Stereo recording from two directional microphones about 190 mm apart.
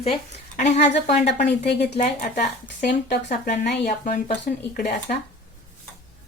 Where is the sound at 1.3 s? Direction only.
65° left (ahead or behind).